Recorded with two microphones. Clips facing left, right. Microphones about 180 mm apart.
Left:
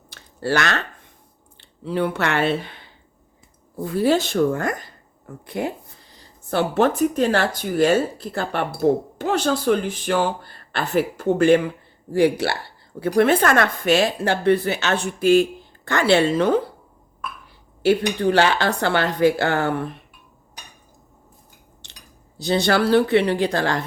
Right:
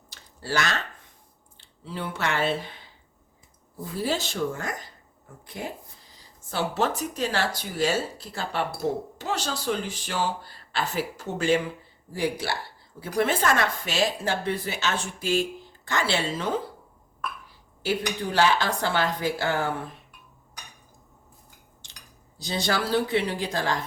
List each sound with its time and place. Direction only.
0.1 s a sound: 65° left (ahead or behind)
1.5 s a woman's voice: 65° left (ahead or behind)
17.8 s a woman's voice: 65° left (ahead or behind)
21.8 s cutlery: 65° left (ahead or behind)
22.4 s a woman's voice: 65° left (ahead or behind)